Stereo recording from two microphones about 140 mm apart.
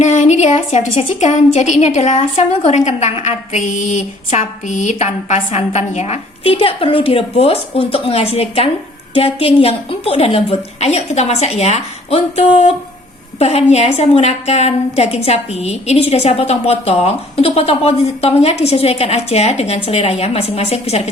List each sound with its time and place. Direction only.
0.0 s a woman's voice: 55° left (ahead or behind)